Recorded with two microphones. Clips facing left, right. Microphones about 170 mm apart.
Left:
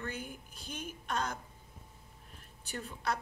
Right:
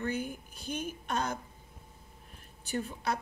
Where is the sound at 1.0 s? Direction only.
20° right (ahead or behind).